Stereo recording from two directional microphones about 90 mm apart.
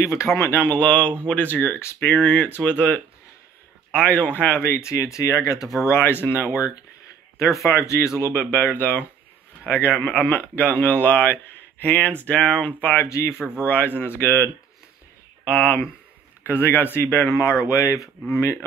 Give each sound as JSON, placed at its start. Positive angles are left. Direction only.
{"t": 0.0, "sound": "speech", "side_deg": 30}
{"t": 4.7, "sound": "speech", "side_deg": 35}
{"t": 5.9, "sound": "speech", "side_deg": 25}
{"t": 8.2, "sound": "speech", "side_deg": 20}
{"t": 13.4, "sound": "speech", "side_deg": -10}
{"t": 13.7, "sound": "speech", "side_deg": 20}
{"t": 15.4, "sound": "speech", "side_deg": 15}
{"t": 17.4, "sound": "speech", "side_deg": 35}